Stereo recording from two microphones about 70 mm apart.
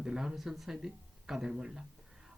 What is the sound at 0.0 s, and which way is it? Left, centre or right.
Speech, centre.